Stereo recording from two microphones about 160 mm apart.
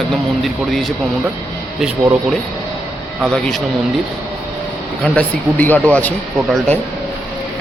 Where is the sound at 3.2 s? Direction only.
5° left (ahead or behind).